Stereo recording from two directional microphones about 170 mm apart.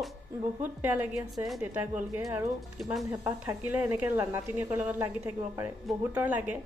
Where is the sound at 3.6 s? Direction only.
10° right (ahead or behind).